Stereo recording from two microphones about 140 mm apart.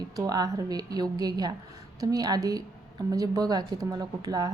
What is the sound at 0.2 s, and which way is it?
A woman's voice, 25° right (ahead or behind).